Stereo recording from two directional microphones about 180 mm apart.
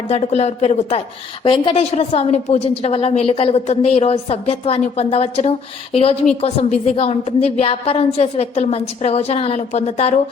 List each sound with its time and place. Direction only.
0.1 s a woman's voice: 35° left (ahead or behind)